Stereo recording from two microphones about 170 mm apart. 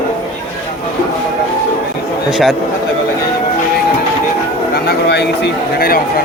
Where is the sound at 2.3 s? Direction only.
Centre (ahead or behind).